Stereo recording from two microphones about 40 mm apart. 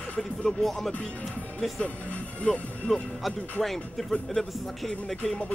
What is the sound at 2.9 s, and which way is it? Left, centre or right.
Speech, centre.